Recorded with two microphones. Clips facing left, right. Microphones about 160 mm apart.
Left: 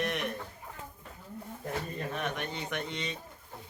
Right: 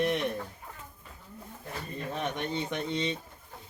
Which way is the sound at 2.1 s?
25° right (ahead or behind).